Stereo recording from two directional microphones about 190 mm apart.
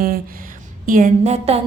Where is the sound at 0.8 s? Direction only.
45° right (ahead or behind).